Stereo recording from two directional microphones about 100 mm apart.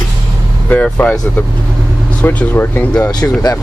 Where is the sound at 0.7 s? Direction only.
15° left (ahead or behind).